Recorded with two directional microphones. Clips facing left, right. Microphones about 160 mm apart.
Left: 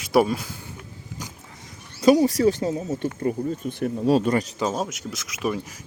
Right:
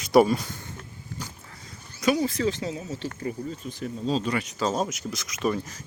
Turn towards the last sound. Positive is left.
turn(degrees=5)  # may be behind; listen again after turning